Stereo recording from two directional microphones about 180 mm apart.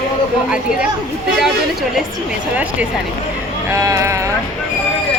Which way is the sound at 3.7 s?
15° right (ahead or behind).